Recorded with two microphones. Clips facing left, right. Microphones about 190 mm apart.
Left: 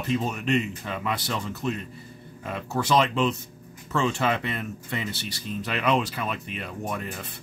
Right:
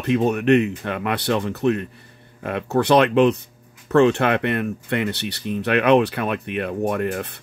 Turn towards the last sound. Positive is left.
turn(degrees=-65)  # may be behind; listen again after turning